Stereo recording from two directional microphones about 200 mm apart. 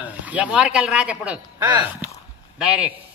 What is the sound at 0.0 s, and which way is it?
Speech, 5° right (ahead or behind).